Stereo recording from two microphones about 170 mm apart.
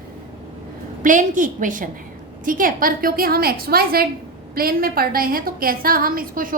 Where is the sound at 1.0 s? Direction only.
50° right (ahead or behind).